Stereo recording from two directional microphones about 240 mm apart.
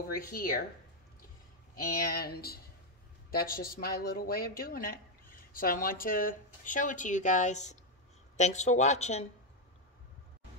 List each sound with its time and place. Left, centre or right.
0.2 s speech: left
2.0 s speech: left